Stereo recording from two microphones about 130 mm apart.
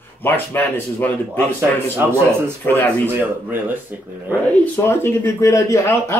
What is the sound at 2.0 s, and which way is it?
Speech, 20° right (ahead or behind).